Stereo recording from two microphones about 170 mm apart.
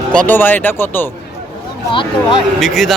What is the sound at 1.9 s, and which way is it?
Speech, 30° left (ahead or behind).